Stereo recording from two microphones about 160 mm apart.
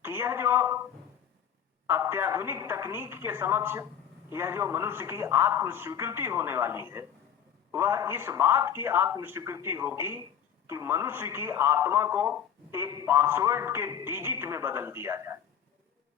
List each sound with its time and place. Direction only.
0.0 s speech: 15° right (ahead or behind)
1.9 s a man's voice: 15° right (ahead or behind)